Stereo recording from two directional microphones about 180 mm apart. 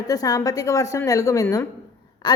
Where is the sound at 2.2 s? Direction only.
20° left (ahead or behind).